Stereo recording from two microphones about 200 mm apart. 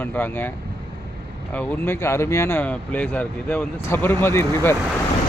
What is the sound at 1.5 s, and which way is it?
Speech, 10° left (ahead or behind).